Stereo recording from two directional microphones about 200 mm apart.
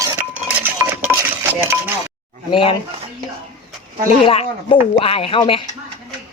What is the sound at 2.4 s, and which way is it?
Speech, 25° left (ahead or behind).